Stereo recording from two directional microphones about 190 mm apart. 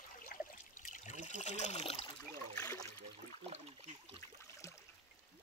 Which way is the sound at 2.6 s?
20° left (ahead or behind).